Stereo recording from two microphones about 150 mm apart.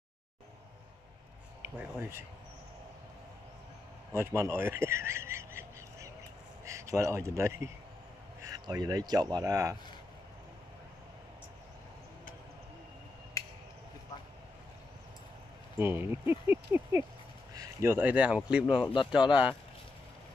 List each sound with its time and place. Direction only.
1.6 s speech: 15° right (ahead or behind)
4.1 s a man's voice: 15° right (ahead or behind)
15.8 s speech: 15° right (ahead or behind)
18.9 s speech: 35° left (ahead or behind)